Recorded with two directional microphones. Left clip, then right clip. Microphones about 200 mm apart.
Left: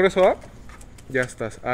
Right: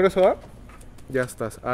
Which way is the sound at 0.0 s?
Centre (ahead or behind).